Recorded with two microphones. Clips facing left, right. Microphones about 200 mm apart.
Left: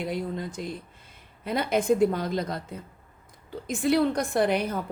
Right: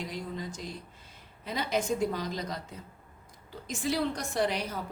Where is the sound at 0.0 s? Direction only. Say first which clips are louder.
Left 6 dB; 55° left (ahead or behind).